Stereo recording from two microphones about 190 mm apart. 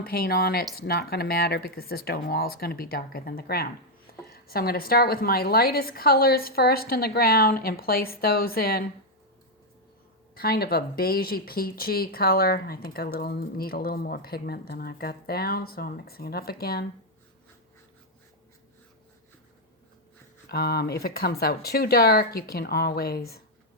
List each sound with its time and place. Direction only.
0.0 s a woman's voice: 50° left (ahead or behind)
10.3 s a woman's voice: 55° left (ahead or behind)
20.5 s a woman's voice: 55° left (ahead or behind)